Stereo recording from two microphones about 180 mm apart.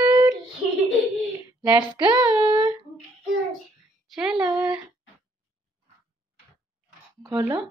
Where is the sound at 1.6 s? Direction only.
20° right (ahead or behind).